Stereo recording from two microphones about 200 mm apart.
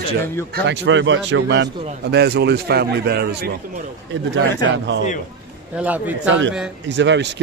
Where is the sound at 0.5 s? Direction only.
65° right (ahead or behind).